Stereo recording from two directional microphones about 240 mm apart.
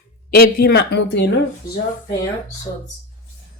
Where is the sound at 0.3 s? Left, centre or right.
Left.